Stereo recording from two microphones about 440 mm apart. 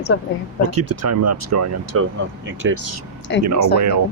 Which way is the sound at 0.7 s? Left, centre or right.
Right.